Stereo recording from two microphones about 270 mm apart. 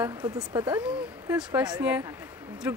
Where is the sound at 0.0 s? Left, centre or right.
Centre.